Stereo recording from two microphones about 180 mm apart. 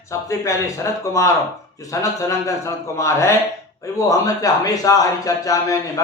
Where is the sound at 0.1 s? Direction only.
15° left (ahead or behind).